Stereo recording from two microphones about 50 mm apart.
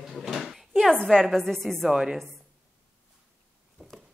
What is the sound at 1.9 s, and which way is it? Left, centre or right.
Speech, centre.